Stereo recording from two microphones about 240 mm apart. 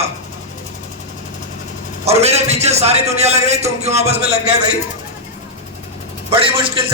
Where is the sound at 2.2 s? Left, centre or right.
Right.